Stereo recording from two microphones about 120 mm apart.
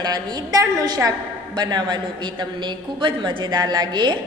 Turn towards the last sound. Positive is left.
turn(degrees=-35)  # may be behind; listen again after turning